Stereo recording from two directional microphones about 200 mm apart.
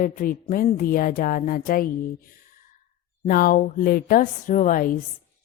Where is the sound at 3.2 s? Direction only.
45° left (ahead or behind).